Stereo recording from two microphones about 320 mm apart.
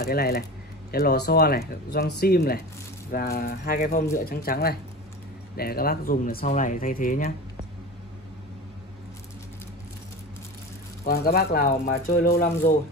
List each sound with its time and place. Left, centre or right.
0.0 s speech: left
11.1 s speech: left